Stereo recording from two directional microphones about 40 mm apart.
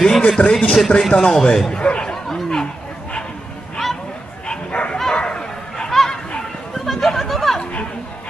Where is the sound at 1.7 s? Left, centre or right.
Left.